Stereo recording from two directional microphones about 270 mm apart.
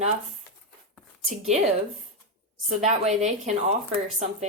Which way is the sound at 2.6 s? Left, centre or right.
Right.